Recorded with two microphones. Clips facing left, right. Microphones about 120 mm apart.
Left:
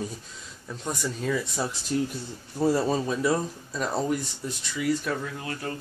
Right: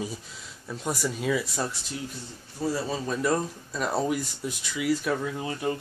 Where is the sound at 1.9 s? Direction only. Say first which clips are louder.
Left 9 dB; 50° left (ahead or behind).